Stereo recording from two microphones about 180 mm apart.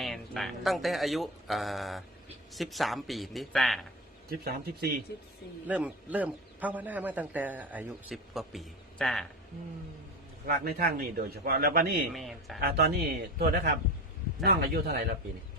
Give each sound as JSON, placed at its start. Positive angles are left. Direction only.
{"t": 0.0, "sound": "speech", "side_deg": 0}
{"t": 4.3, "sound": "a man's voice", "side_deg": -55}
{"t": 5.6, "sound": "a man's voice", "side_deg": -10}
{"t": 10.4, "sound": "a man's voice", "side_deg": -55}
{"t": 12.1, "sound": "speech", "side_deg": 0}
{"t": 12.5, "sound": "a man's voice", "side_deg": -60}